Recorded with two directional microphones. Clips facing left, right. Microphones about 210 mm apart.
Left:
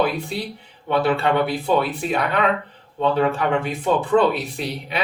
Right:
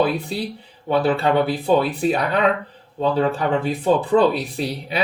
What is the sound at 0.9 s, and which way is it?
Speech, 30° right (ahead or behind).